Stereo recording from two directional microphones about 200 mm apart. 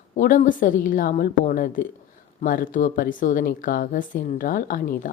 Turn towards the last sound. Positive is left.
turn(degrees=45)  # may be behind; listen again after turning